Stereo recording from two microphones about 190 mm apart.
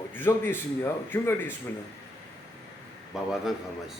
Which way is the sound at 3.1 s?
Centre (ahead or behind).